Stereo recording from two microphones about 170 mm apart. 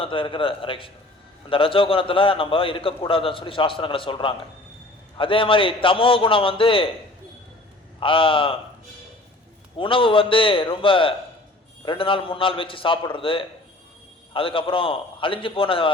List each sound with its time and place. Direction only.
0.0 s a man's voice: 30° left (ahead or behind)
7.9 s a man's voice: 30° left (ahead or behind)
9.7 s a man's voice: 30° left (ahead or behind)